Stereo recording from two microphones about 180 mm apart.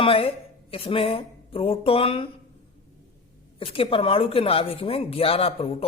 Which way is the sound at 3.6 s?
30° left (ahead or behind).